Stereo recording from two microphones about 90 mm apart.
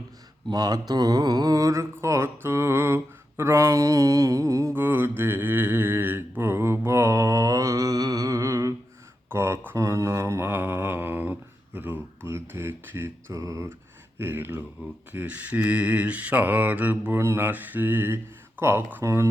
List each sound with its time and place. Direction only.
0.5 s mantra: 50° right (ahead or behind)
4.7 s mantra: 25° right (ahead or behind)
13.3 s mantra: 35° right (ahead or behind)
14.2 s mantra: 25° right (ahead or behind)